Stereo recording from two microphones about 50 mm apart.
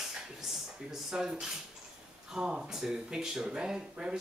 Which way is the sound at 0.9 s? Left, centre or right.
Centre.